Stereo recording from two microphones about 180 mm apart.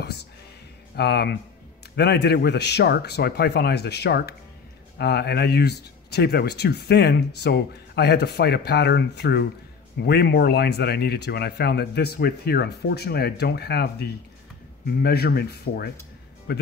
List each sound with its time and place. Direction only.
0.9 s speech: 65° left (ahead or behind)